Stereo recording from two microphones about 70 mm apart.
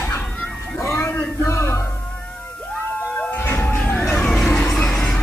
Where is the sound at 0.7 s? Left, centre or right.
Left.